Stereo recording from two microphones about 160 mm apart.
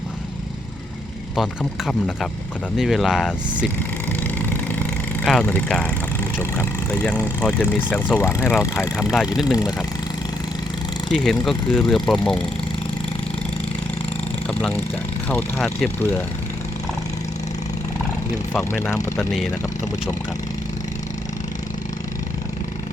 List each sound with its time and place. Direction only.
1.4 s speech: centre (ahead or behind)
4.2 s vehicle: 10° left (ahead or behind)
5.2 s speech: 5° left (ahead or behind)
9.1 s speech: 5° right (ahead or behind)
11.1 s speech: centre (ahead or behind)
15.3 s speech: 10° left (ahead or behind)
18.7 s speech: 15° left (ahead or behind)